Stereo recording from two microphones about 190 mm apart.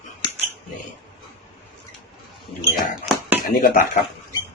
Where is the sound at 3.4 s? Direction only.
50° left (ahead or behind).